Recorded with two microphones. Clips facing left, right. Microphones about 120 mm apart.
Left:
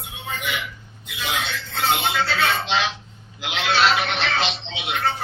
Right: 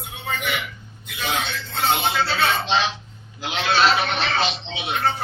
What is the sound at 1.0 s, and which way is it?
Speech, 40° right (ahead or behind).